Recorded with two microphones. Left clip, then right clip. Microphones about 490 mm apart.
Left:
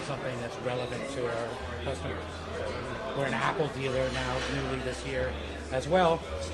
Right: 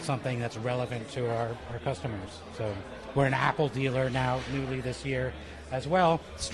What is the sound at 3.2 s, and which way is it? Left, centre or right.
Speech, right.